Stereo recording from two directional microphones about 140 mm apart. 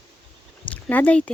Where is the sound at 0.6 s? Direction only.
10° left (ahead or behind).